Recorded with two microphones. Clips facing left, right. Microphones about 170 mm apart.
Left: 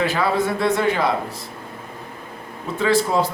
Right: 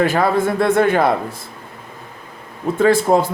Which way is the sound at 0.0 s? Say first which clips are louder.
Right 4 dB; 50° right (ahead or behind).